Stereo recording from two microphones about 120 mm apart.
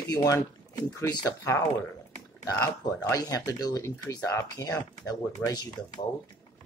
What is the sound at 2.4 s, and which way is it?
Speech, 30° left (ahead or behind).